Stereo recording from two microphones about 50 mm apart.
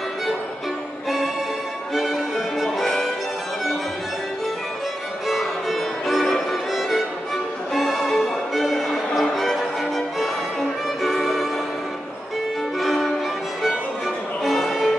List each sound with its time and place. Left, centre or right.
2.0 s music: centre
5.3 s music: centre
12.8 s violin: centre
13.6 s music: centre